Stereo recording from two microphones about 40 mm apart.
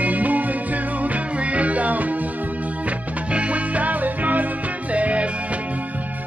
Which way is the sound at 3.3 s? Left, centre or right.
Right.